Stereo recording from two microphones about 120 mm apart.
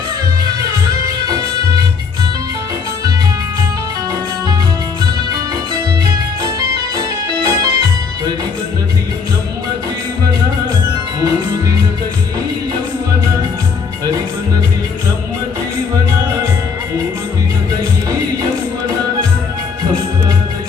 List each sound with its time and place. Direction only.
6.4 s music: 30° right (ahead or behind)